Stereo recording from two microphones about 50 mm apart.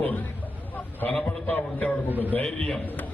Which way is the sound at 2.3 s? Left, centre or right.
Left.